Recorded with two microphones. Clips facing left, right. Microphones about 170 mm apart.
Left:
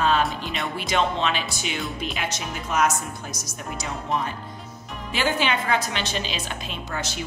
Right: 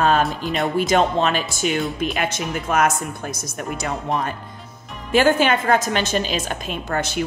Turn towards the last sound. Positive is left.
turn(degrees=-55)  # may be behind; listen again after turning